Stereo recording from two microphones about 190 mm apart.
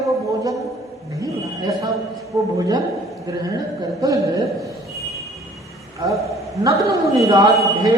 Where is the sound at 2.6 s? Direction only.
20° right (ahead or behind).